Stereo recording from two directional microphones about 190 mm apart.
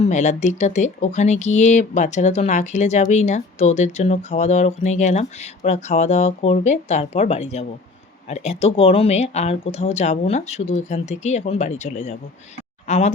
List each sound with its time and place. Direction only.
0.0 s speech: 40° left (ahead or behind)